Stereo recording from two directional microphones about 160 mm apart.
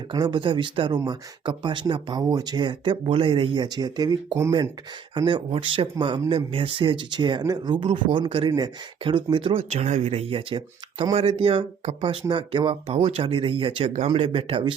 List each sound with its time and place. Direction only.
0.1 s speech: 30° right (ahead or behind)